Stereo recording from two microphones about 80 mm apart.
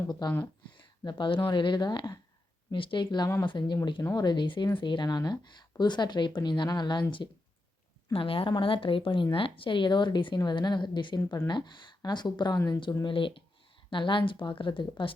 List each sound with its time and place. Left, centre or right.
0.1 s speech: left
0.8 s a woman's voice: left
2.7 s speech: left
3.4 s speech: left
4.1 s a woman's voice: left
8.2 s a woman's voice: left
12.5 s speech: left
13.1 s speech: left